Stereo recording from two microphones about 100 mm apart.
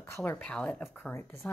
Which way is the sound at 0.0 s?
25° left (ahead or behind).